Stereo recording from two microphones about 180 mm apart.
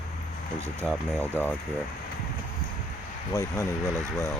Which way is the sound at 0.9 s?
10° right (ahead or behind).